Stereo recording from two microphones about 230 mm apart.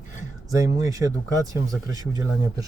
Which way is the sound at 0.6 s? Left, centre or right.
Centre.